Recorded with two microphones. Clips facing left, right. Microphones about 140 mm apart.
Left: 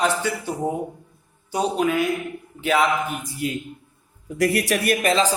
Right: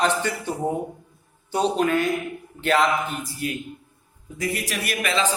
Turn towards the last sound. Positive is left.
turn(degrees=35)  # may be behind; listen again after turning